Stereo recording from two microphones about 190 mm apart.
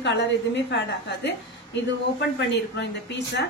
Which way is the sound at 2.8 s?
65° left (ahead or behind).